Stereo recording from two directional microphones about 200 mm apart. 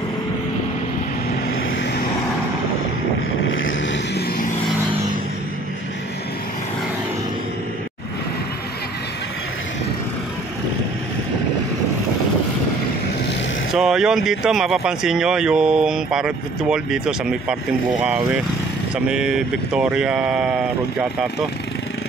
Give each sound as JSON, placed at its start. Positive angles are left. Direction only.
{"t": 3.4, "sound": "vehicle", "side_deg": 75}
{"t": 13.7, "sound": "speech", "side_deg": 0}
{"t": 19.0, "sound": "speech", "side_deg": -5}